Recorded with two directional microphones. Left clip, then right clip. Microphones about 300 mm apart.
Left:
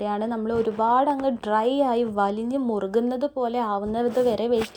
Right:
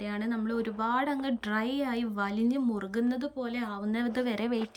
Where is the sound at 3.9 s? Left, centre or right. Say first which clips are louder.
Left 8 dB; centre.